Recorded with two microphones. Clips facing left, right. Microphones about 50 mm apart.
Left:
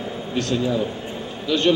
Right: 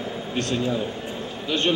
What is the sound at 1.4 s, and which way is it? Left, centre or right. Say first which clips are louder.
Speech: left 5 dB; right.